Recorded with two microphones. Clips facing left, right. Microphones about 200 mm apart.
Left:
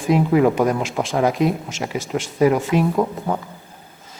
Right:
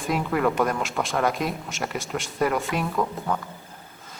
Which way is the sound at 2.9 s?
25° left (ahead or behind).